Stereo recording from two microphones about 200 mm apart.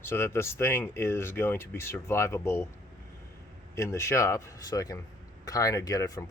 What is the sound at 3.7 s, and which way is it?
Speech, 15° left (ahead or behind).